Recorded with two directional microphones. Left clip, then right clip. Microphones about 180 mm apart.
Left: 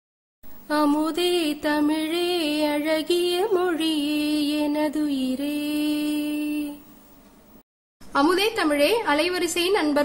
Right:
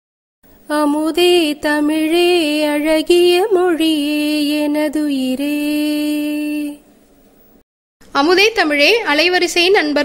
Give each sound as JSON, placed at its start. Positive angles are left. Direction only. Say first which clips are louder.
{"t": 0.7, "sound": "music", "louder": "right 6 dB", "side_deg": -25}
{"t": 8.1, "sound": "a woman's voice", "louder": "right 8 dB", "side_deg": -25}